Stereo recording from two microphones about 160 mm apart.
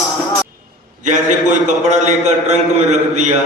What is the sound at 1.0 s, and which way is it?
A man's voice, 50° right (ahead or behind).